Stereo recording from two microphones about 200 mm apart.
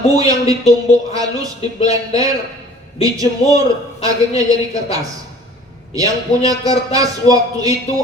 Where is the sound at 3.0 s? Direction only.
15° right (ahead or behind).